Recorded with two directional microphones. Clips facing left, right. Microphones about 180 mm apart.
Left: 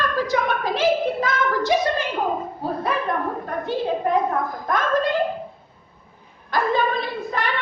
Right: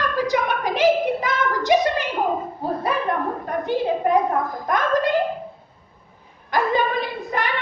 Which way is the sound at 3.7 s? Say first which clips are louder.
Right 2 dB; 15° right (ahead or behind).